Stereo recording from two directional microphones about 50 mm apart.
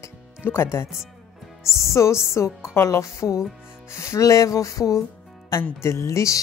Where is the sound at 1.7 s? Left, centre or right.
Left.